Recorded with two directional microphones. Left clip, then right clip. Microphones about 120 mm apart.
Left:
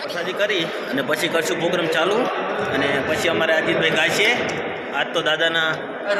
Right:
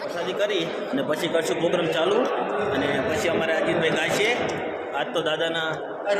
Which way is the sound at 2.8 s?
25° left (ahead or behind).